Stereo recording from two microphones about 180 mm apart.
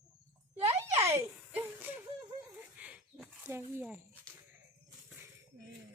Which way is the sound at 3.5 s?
15° right (ahead or behind).